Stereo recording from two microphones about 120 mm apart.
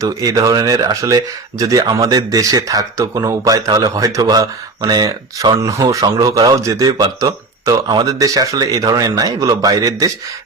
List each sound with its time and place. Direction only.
0.0 s speech: 30° right (ahead or behind)